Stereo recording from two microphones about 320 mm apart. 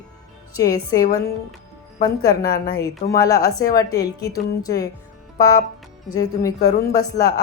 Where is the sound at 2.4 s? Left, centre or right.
Left.